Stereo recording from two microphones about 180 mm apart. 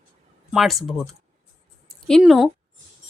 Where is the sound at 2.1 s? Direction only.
Centre (ahead or behind).